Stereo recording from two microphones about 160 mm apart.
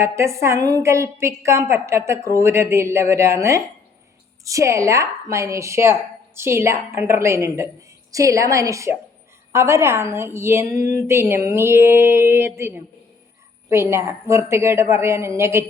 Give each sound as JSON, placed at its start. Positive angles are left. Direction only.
{"t": 0.0, "sound": "a woman's voice", "side_deg": -15}